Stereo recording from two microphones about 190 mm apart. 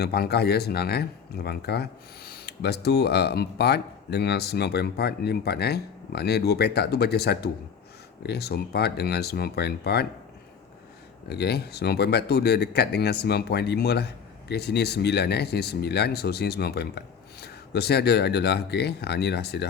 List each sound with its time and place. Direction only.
0.0 s speech: 55° left (ahead or behind)
11.3 s speech: 60° left (ahead or behind)